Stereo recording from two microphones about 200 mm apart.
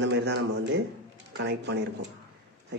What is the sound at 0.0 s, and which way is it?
A man's voice, 60° right (ahead or behind).